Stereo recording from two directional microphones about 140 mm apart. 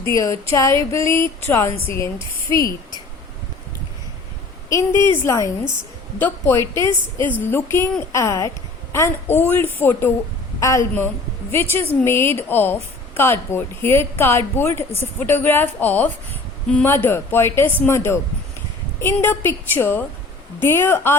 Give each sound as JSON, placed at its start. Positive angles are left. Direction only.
{"t": 0.0, "sound": "speech", "side_deg": 20}
{"t": 4.7, "sound": "a woman's voice", "side_deg": 20}